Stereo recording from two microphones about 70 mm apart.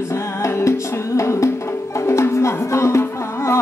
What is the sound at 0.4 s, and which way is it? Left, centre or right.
Music, left.